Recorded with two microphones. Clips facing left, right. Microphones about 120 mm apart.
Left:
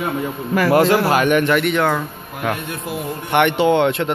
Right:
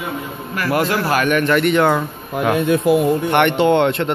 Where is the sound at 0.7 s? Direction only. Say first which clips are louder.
Left 3 dB; 25° left (ahead or behind).